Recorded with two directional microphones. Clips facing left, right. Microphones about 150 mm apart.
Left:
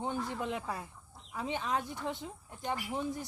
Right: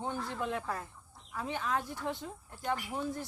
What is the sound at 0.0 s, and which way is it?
Speech, 15° left (ahead or behind).